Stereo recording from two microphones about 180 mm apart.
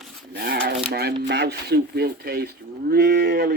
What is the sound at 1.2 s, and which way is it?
Speech, 65° right (ahead or behind).